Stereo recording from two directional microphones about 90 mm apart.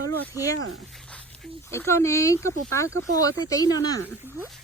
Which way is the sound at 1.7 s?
30° left (ahead or behind).